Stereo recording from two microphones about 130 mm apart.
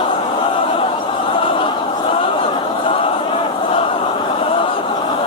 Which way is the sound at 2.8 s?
45° left (ahead or behind).